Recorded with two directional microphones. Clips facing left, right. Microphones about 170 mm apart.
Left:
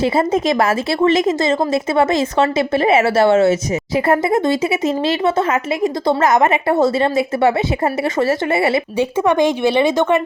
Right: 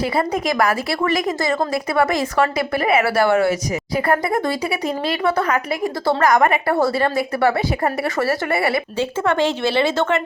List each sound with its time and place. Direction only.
0.0 s a woman's voice: 25° left (ahead or behind)